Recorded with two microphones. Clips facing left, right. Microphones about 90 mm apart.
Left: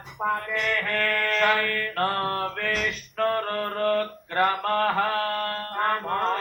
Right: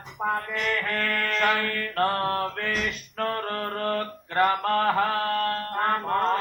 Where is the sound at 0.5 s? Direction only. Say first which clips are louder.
Left 1 dB; 30° right (ahead or behind).